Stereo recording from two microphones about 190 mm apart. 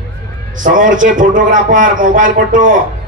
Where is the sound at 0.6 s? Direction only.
45° right (ahead or behind).